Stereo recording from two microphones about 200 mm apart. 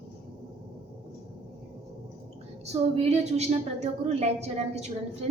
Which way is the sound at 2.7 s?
30° right (ahead or behind).